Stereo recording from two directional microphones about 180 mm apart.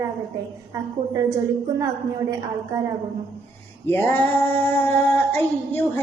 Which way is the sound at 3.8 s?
10° left (ahead or behind).